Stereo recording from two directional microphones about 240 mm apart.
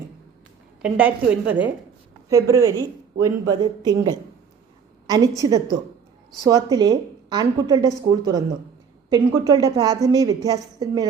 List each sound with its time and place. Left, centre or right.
0.8 s a woman's voice: centre